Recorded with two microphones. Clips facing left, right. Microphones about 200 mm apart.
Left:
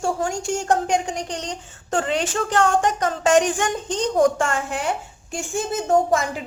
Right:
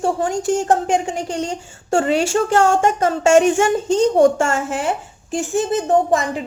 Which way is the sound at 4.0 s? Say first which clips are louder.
Right 4 dB; 25° right (ahead or behind).